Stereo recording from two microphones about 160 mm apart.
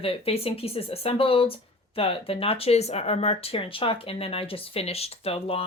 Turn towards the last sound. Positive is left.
turn(degrees=35)  # may be behind; listen again after turning